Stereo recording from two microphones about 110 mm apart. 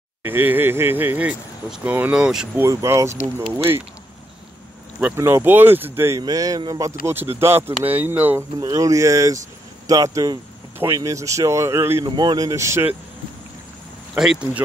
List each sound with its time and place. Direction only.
0.2 s speech: 20° right (ahead or behind)
2.5 s speech: 25° right (ahead or behind)
5.1 s speech: 25° right (ahead or behind)
6.2 s speech: 35° right (ahead or behind)
8.5 s speech: 30° right (ahead or behind)
12.0 s speech: 40° right (ahead or behind)
14.1 s speech: 5° right (ahead or behind)